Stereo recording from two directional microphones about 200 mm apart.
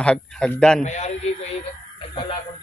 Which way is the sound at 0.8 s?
35° left (ahead or behind).